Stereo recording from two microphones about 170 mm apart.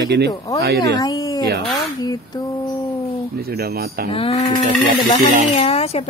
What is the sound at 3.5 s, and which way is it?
Speech, 65° right (ahead or behind).